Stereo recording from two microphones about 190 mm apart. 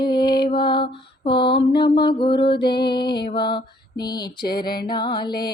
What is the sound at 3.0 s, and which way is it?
Music, 60° left (ahead or behind).